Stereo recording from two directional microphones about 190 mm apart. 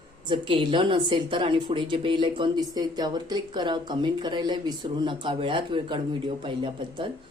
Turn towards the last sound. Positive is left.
turn(degrees=-25)  # may be behind; listen again after turning